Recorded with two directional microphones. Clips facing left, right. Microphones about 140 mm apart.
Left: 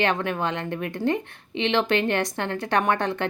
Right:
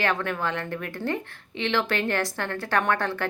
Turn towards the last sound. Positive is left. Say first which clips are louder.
# left 2 dB
turn(degrees=20)  # may be behind; listen again after turning